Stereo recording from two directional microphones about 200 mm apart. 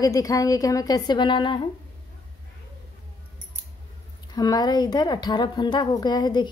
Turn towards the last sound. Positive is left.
turn(degrees=20)  # may be behind; listen again after turning